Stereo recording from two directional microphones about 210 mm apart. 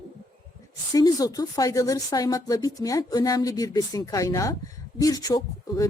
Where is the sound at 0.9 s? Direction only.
15° left (ahead or behind).